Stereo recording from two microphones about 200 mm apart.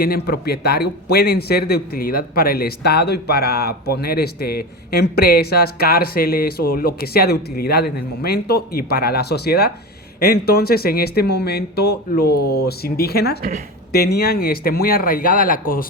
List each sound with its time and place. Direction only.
0.0 s a man's voice: 50° left (ahead or behind)